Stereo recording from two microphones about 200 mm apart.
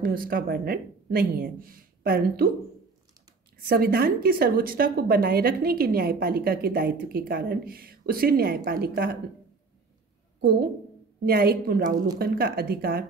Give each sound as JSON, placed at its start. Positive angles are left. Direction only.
{"t": 0.0, "sound": "speech", "side_deg": -45}
{"t": 3.6, "sound": "speech", "side_deg": -50}
{"t": 10.4, "sound": "speech", "side_deg": -50}